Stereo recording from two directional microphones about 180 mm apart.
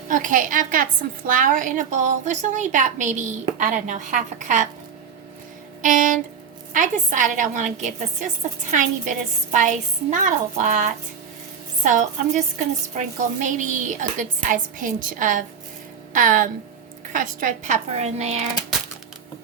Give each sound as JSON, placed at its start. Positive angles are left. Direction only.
{"t": 0.1, "sound": "speech", "side_deg": -45}
{"t": 5.8, "sound": "a woman's voice", "side_deg": -45}